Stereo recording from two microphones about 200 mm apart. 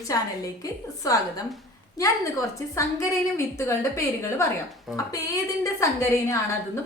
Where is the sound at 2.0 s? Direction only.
15° left (ahead or behind).